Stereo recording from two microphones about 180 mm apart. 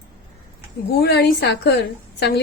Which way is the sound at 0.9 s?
60° left (ahead or behind).